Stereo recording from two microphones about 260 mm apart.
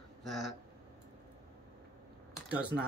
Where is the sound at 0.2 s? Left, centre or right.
Centre.